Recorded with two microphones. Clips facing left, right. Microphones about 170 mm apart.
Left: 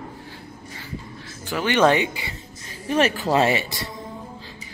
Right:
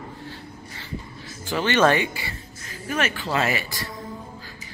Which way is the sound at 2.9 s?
35° left (ahead or behind).